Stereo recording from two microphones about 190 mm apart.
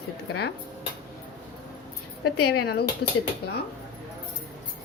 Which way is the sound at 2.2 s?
55° left (ahead or behind).